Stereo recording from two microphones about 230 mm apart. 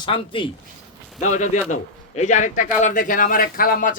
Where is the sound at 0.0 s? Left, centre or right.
Left.